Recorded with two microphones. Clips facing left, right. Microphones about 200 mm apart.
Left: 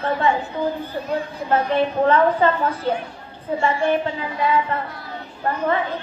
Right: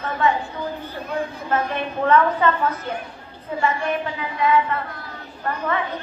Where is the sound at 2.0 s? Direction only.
30° left (ahead or behind).